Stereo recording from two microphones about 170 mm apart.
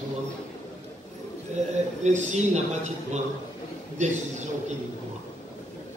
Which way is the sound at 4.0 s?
45° right (ahead or behind).